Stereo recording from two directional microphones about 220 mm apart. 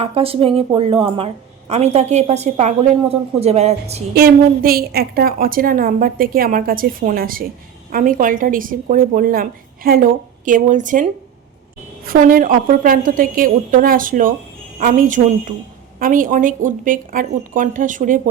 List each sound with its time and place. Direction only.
0.0 s a woman's voice: 25° right (ahead or behind)
4.1 s a woman's voice: 45° right (ahead or behind)